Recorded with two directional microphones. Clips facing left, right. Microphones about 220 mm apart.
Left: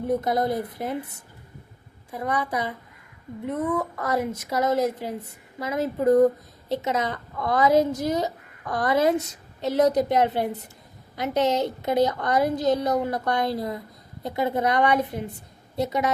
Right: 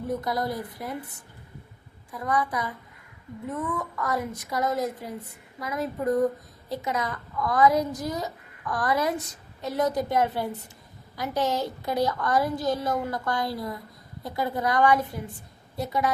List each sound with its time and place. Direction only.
0.2 s a woman's voice: 20° left (ahead or behind)
2.0 s a woman's voice: 25° left (ahead or behind)
3.7 s speech: 35° left (ahead or behind)
4.0 s a woman's voice: 25° left (ahead or behind)